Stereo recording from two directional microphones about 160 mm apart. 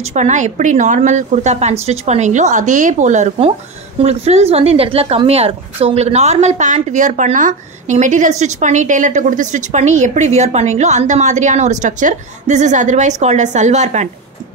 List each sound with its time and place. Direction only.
0.0 s a woman's voice: 45° right (ahead or behind)